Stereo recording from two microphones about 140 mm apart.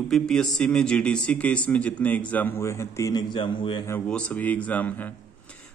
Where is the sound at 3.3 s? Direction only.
35° left (ahead or behind).